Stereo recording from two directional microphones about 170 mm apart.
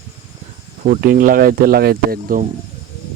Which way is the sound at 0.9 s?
55° right (ahead or behind).